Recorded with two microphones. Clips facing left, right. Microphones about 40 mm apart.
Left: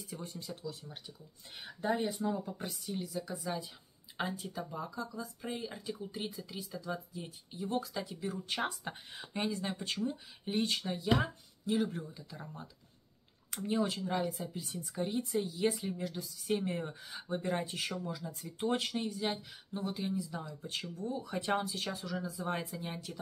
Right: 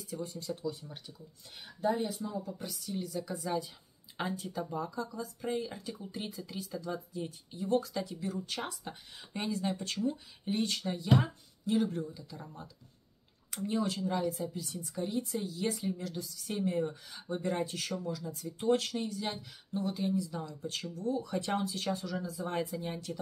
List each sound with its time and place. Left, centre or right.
0.1 s speech: left
0.6 s speech: centre
1.6 s speech: left
2.2 s speech: left
2.5 s speech: left
3.0 s speech: centre
8.3 s speech: left
9.3 s speech: centre
12.1 s speech: centre
13.7 s speech: centre
14.5 s speech: left
17.1 s speech: centre
18.0 s speech: centre